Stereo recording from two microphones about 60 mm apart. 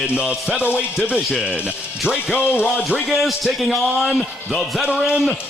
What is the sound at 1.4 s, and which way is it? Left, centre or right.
Speech, centre.